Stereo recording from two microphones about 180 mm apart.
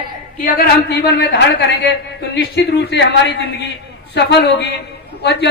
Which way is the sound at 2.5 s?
70° left (ahead or behind).